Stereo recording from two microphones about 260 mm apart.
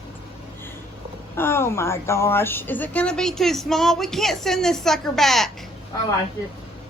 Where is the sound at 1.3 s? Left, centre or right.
Centre.